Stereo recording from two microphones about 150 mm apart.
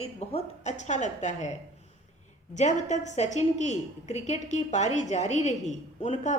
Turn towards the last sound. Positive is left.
turn(degrees=50)  # may be behind; listen again after turning